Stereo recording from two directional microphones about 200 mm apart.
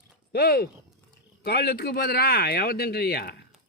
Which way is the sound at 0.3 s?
50° left (ahead or behind).